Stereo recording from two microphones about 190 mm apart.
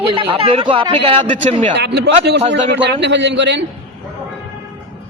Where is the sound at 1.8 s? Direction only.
65° right (ahead or behind).